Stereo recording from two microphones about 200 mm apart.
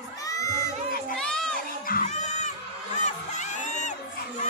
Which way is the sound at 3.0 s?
35° left (ahead or behind).